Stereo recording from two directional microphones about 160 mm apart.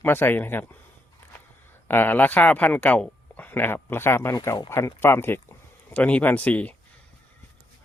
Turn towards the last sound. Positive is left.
turn(degrees=10)  # may be behind; listen again after turning